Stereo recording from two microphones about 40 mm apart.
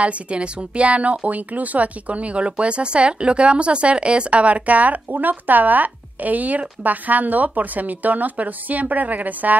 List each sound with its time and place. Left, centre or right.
0.0 s speech: right